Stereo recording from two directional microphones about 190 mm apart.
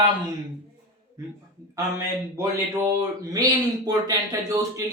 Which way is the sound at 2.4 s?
15° right (ahead or behind).